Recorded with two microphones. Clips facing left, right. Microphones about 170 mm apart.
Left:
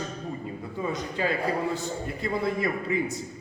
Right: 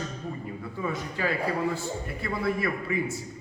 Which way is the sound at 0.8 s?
20° left (ahead or behind).